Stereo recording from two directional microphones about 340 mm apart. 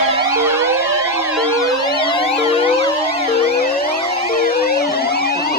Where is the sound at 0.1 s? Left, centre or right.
Centre.